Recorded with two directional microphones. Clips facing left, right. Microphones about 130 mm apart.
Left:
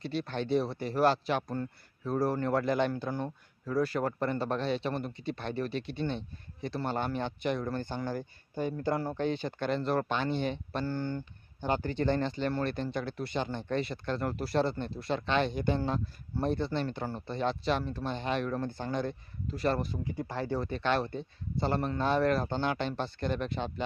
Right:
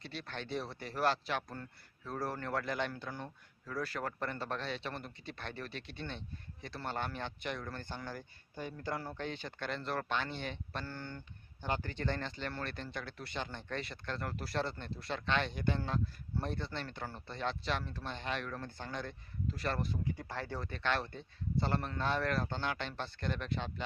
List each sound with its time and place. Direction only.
0.0 s speech: 25° left (ahead or behind)